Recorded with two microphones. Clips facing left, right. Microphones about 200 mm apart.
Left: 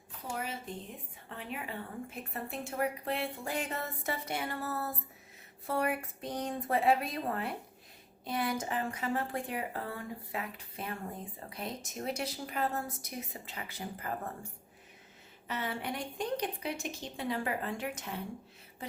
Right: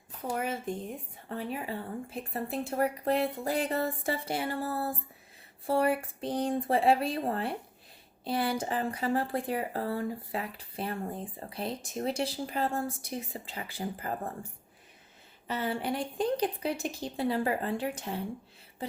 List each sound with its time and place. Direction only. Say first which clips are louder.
0.3 s a woman's voice: right 6 dB; 50° right (ahead or behind)
1.3 s speech: right 6 dB; 35° right (ahead or behind)
15.4 s speech: right 5 dB; 30° right (ahead or behind)